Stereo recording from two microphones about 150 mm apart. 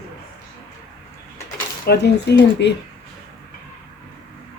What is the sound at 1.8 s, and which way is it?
Speech, 90° left.